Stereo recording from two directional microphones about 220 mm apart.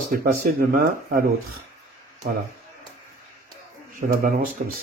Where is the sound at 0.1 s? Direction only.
40° right (ahead or behind).